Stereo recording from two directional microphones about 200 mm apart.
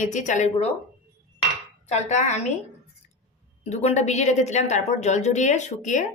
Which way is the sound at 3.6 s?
35° left (ahead or behind).